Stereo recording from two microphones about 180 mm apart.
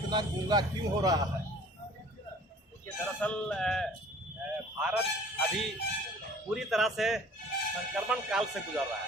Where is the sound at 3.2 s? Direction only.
5° left (ahead or behind).